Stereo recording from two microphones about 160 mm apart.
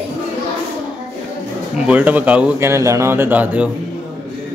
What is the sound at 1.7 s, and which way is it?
Speech, 10° right (ahead or behind).